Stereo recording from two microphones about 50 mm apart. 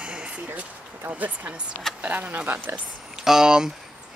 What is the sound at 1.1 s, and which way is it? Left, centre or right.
Speech, right.